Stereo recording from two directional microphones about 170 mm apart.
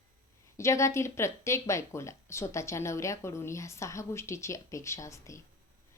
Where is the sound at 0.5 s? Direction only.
15° left (ahead or behind).